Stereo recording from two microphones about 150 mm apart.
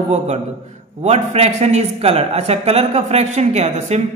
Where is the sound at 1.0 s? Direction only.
50° right (ahead or behind).